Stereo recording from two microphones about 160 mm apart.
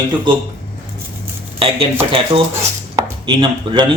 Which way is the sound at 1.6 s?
35° right (ahead or behind).